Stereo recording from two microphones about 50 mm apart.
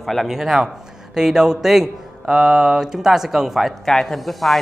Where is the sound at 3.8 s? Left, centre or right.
Centre.